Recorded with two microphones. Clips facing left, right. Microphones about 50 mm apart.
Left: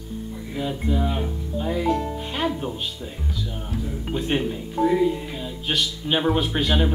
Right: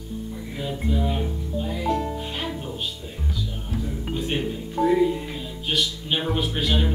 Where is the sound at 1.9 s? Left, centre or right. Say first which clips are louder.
Right 1 dB; centre.